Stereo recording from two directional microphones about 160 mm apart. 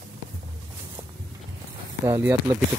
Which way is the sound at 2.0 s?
20° right (ahead or behind).